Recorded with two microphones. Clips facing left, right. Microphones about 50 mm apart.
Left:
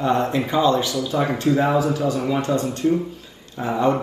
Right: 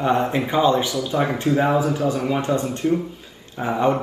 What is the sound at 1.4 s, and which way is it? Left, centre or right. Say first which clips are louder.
A man's voice: left 1 dB; centre.